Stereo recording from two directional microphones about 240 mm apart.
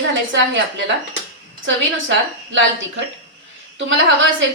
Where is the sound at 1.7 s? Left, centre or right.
Right.